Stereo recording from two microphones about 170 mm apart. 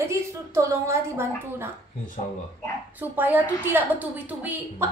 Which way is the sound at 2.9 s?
10° right (ahead or behind).